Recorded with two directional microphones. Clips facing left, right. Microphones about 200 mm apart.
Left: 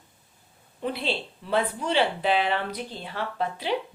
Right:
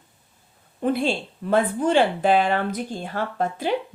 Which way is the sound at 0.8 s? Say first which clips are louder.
Right 7 dB; 50° right (ahead or behind).